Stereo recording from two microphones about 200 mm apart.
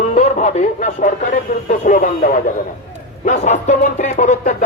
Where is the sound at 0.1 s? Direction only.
35° left (ahead or behind).